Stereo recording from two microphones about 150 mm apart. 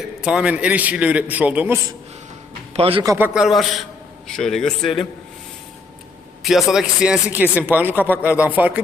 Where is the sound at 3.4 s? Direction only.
Centre (ahead or behind).